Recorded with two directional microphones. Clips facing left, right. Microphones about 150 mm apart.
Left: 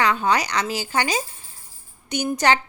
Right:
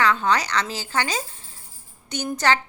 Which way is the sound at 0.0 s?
15° left (ahead or behind).